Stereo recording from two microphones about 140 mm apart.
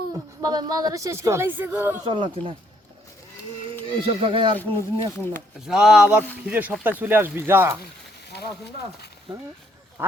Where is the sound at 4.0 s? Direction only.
40° right (ahead or behind).